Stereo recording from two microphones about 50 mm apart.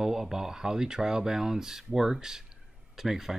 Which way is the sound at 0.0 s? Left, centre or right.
Centre.